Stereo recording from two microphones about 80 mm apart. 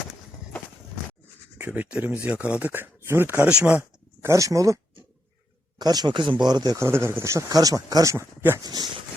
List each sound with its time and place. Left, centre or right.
1.5 s speech: centre
3.5 s speech: centre
3.8 s speech: right
5.8 s speech: right
6.5 s speech: right
6.7 s speech: right
8.1 s speech: right
8.6 s speech: right